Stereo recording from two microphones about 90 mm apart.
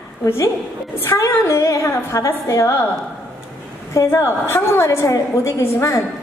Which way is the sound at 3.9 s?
35° left (ahead or behind).